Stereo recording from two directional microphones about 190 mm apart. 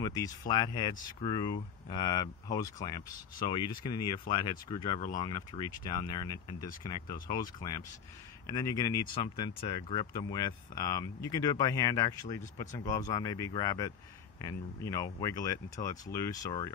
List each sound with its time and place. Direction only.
0.0 s speech: 20° left (ahead or behind)